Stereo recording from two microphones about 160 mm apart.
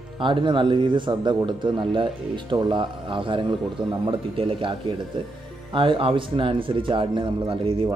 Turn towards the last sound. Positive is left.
turn(degrees=-30)  # may be behind; listen again after turning